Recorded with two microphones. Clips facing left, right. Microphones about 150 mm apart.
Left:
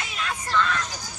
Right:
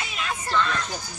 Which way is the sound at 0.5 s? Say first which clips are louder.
Left 1 dB; centre (ahead or behind).